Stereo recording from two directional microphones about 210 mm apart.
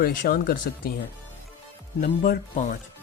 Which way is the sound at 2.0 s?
40° left (ahead or behind).